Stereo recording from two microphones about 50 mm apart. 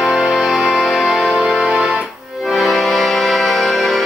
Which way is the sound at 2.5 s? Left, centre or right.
Centre.